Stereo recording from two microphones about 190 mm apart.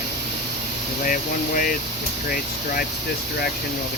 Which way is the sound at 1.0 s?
45° left (ahead or behind).